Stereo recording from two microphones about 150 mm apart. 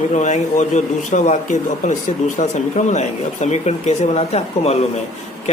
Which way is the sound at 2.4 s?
50° left (ahead or behind).